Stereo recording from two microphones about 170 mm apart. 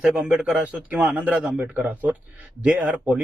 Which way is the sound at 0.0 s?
5° right (ahead or behind).